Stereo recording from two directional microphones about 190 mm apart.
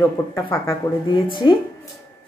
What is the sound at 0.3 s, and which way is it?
Speech, 15° left (ahead or behind).